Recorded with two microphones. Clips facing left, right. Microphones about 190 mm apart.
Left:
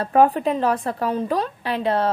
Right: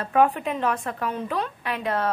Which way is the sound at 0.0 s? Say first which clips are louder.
Left 4 dB; 35° left (ahead or behind).